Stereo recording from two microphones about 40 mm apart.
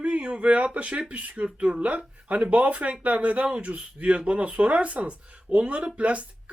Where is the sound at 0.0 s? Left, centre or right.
Right.